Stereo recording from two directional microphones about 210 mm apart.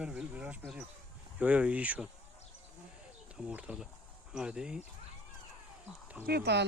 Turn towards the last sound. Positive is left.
turn(degrees=-55)  # may be behind; listen again after turning